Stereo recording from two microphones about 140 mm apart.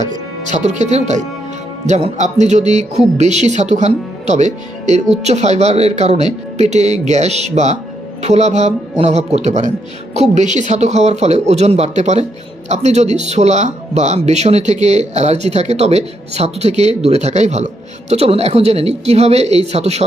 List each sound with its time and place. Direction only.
0.4 s speech: 55° right (ahead or behind)